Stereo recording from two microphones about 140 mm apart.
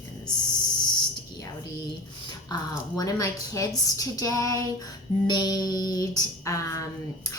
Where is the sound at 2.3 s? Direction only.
30° left (ahead or behind).